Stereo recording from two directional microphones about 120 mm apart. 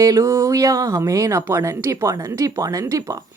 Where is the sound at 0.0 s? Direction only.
25° right (ahead or behind).